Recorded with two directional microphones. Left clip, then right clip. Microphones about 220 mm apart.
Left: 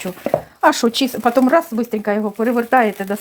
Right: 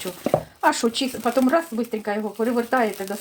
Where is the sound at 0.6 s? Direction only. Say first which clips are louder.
Left 8 dB; 40° left (ahead or behind).